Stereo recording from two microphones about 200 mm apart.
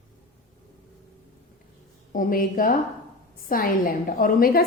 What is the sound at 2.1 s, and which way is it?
A woman's voice, 45° left (ahead or behind).